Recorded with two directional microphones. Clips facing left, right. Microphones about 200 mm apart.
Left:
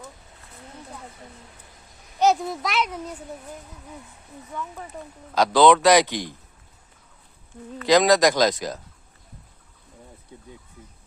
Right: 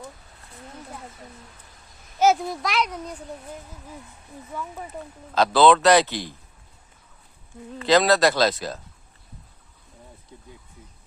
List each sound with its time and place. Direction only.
2.1 s a child's voice: centre (ahead or behind)
4.5 s speech: 5° right (ahead or behind)
5.3 s a man's voice: 15° left (ahead or behind)
7.9 s a man's voice: 15° left (ahead or behind)